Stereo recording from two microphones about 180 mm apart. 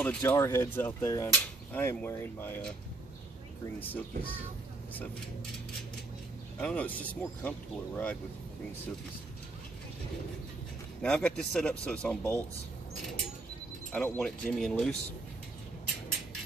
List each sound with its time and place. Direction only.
0.0 s speech: 10° left (ahead or behind)
3.8 s speech: 10° left (ahead or behind)
6.6 s speech: 5° left (ahead or behind)
11.0 s speech: 5° left (ahead or behind)
13.9 s speech: 5° left (ahead or behind)